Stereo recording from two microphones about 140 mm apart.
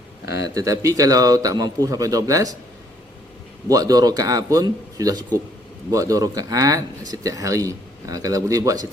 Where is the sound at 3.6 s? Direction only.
25° right (ahead or behind).